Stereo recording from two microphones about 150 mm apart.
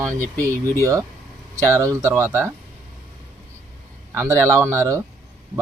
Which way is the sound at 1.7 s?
20° right (ahead or behind).